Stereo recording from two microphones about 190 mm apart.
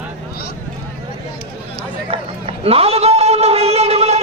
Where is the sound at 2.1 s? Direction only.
30° right (ahead or behind).